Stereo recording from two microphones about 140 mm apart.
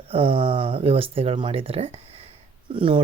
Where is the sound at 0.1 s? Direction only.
40° right (ahead or behind).